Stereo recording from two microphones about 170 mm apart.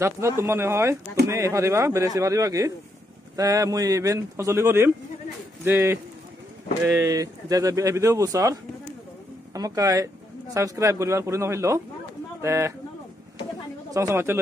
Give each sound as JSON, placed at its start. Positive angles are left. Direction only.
{"t": 0.0, "sound": "speech", "side_deg": -15}
{"t": 13.8, "sound": "speech", "side_deg": -20}